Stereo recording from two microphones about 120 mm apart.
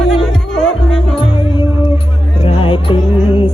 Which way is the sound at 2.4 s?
50° left (ahead or behind).